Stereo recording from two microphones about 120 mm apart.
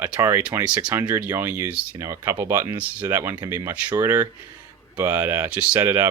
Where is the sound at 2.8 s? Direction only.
10° right (ahead or behind).